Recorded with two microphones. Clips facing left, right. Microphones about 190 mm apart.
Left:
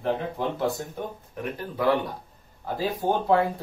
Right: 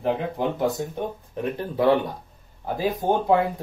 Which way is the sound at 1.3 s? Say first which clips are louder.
Right 5 dB; 25° right (ahead or behind).